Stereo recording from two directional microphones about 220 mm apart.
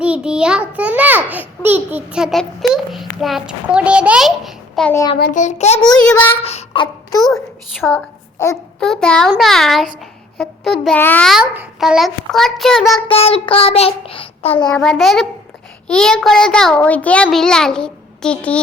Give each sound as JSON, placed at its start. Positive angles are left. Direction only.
{"t": 0.0, "sound": "a child's voice", "side_deg": -5}
{"t": 5.2, "sound": "child singing", "side_deg": 35}
{"t": 6.1, "sound": "a child's voice", "side_deg": 5}
{"t": 6.3, "sound": "child singing", "side_deg": 30}
{"t": 7.2, "sound": "a sound", "side_deg": 0}
{"t": 8.8, "sound": "a child's voice", "side_deg": 5}
{"t": 13.1, "sound": "child singing", "side_deg": 25}
{"t": 14.7, "sound": "a child's voice", "side_deg": 0}